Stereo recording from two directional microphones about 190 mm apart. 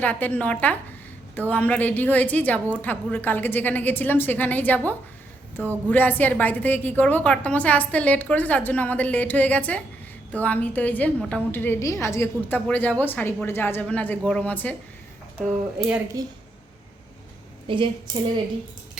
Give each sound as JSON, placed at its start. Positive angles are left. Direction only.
{"t": 0.0, "sound": "a woman's voice", "side_deg": 10}
{"t": 16.2, "sound": "a woman's voice", "side_deg": -20}
{"t": 17.7, "sound": "a woman's voice", "side_deg": -25}